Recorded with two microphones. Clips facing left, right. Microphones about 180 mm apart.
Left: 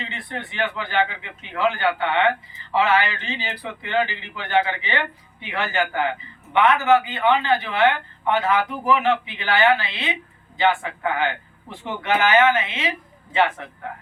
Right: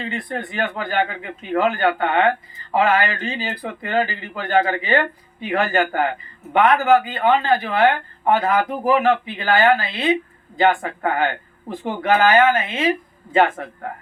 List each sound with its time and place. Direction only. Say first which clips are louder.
0.0 s speech: right 6 dB; 45° right (ahead or behind)